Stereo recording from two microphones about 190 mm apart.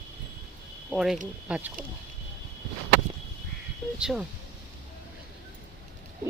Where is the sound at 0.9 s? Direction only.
Centre (ahead or behind).